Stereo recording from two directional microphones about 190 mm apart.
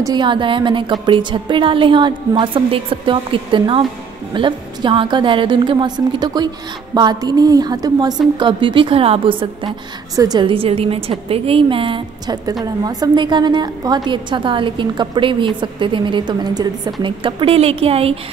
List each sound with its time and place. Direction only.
0.0 s a woman's voice: 25° right (ahead or behind)